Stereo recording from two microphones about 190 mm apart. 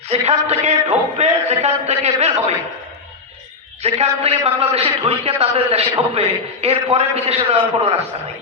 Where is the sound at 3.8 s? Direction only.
35° right (ahead or behind).